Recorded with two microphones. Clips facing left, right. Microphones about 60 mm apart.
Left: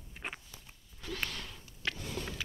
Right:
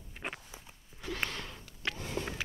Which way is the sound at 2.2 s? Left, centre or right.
Right.